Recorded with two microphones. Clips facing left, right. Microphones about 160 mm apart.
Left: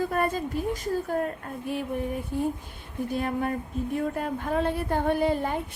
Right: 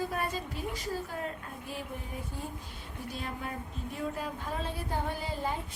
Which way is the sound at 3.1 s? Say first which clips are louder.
Left 11 dB; 55° left (ahead or behind).